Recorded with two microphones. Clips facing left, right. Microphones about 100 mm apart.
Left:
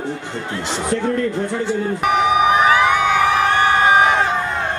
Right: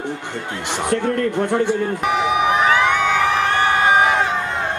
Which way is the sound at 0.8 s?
60° right (ahead or behind).